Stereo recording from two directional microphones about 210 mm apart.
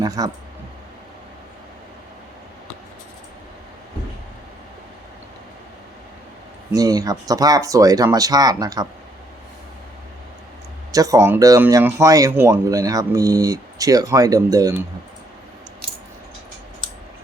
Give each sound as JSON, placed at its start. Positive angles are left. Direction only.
{"t": 0.0, "sound": "speech", "side_deg": -15}
{"t": 6.7, "sound": "speech", "side_deg": -15}
{"t": 10.9, "sound": "speech", "side_deg": -15}